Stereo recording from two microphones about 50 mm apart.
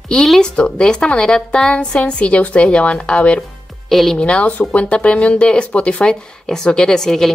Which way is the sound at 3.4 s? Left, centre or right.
Centre.